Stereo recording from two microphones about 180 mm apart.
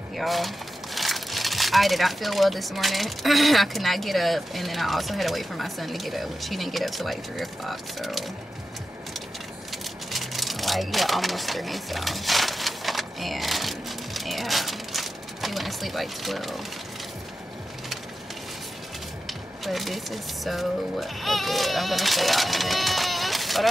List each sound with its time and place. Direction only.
0.2 s speech: centre (ahead or behind)
10.1 s a sound: centre (ahead or behind)
19.2 s speech: centre (ahead or behind)